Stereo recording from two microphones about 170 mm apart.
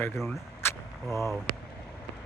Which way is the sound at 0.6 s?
15° left (ahead or behind).